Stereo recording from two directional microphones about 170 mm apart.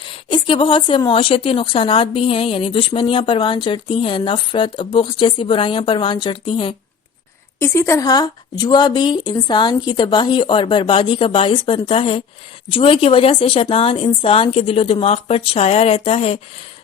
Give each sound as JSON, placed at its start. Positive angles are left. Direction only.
{"t": 0.0, "sound": "a woman's voice", "side_deg": 30}
{"t": 7.6, "sound": "a woman's voice", "side_deg": 15}